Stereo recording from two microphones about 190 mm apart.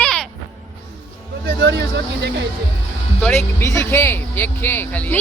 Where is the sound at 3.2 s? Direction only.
10° left (ahead or behind).